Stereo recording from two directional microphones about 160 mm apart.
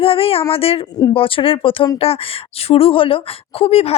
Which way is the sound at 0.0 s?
35° left (ahead or behind).